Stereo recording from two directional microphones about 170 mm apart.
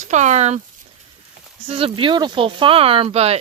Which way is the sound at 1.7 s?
35° right (ahead or behind).